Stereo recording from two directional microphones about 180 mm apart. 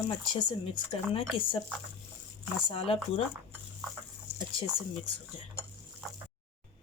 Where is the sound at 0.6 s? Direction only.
30° left (ahead or behind).